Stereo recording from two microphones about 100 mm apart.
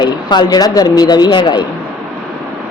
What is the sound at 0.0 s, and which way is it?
Speech, 45° left (ahead or behind).